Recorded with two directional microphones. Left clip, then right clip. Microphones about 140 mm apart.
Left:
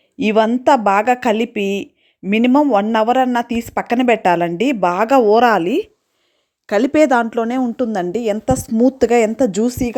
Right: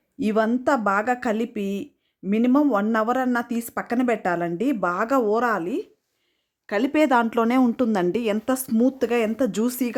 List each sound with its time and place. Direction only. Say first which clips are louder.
0.2 s a woman's voice: left 8 dB; 20° left (ahead or behind)
3.8 s a woman's voice: left 9 dB; 20° left (ahead or behind)
7.3 s a woman's voice: left 2 dB; 5° left (ahead or behind)
8.8 s a woman's voice: left 10 dB; 30° left (ahead or behind)